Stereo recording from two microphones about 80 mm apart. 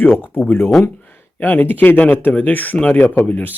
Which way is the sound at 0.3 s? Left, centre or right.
Left.